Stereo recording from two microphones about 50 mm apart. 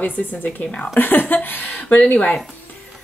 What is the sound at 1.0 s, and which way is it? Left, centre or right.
Speech, left.